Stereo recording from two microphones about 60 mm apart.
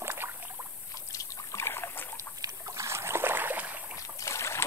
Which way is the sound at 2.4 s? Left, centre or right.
Right.